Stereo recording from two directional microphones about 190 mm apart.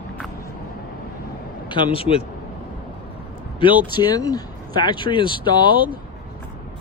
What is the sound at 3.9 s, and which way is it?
Speech, 20° left (ahead or behind).